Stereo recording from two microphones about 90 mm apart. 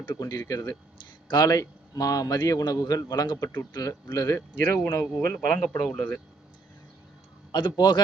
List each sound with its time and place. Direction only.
0.1 s a man's voice: 40° left (ahead or behind)
4.4 s speech: 20° left (ahead or behind)
5.6 s speech: 10° left (ahead or behind)
7.5 s a man's voice: 55° left (ahead or behind)